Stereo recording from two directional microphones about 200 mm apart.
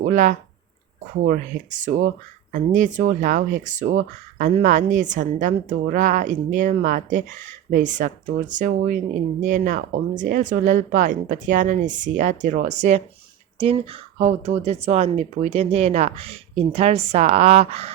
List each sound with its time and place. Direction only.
0.0 s speech: 40° right (ahead or behind)
14.2 s speech: 35° right (ahead or behind)